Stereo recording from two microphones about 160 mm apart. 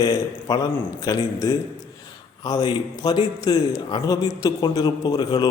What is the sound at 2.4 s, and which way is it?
A man's voice, 25° left (ahead or behind).